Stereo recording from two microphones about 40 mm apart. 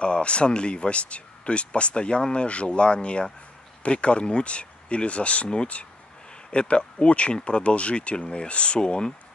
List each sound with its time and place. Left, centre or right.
0.0 s speech: left